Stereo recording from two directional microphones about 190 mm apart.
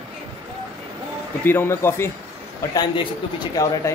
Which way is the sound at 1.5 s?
10° left (ahead or behind).